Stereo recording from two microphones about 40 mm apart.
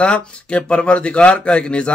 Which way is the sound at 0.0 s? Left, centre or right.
Left.